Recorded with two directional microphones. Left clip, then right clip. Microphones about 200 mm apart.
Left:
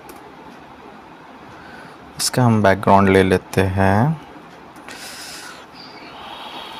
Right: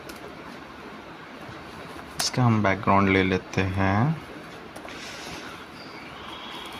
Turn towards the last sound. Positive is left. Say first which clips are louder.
# left 5 dB
turn(degrees=50)  # may be behind; listen again after turning